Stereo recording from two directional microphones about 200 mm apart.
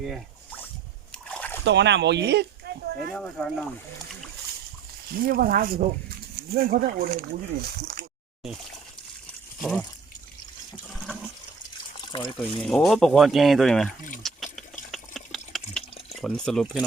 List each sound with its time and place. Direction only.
1.1 s a sound: 5° left (ahead or behind)
1.6 s speech: 60° right (ahead or behind)
3.1 s speech: 5° left (ahead or behind)
5.1 s speech: 45° right (ahead or behind)
9.6 s speech: 5° left (ahead or behind)
10.9 s toilet flush: centre (ahead or behind)
12.1 s speech: 25° left (ahead or behind)
12.6 s speech: centre (ahead or behind)
14.2 s liquid: centre (ahead or behind)
14.9 s water: centre (ahead or behind)
16.2 s speech: centre (ahead or behind)